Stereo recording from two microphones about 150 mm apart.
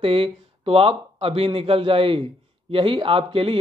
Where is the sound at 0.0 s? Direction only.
40° right (ahead or behind).